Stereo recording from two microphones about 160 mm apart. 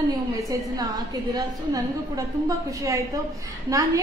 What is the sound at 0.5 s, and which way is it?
A woman's voice, 25° right (ahead or behind).